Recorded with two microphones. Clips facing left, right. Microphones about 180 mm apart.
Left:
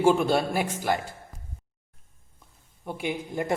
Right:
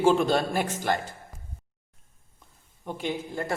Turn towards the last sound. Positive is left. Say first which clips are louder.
# left 2 dB
turn(degrees=15)  # may be behind; listen again after turning